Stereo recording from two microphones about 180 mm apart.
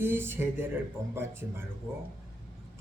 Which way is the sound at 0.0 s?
10° right (ahead or behind).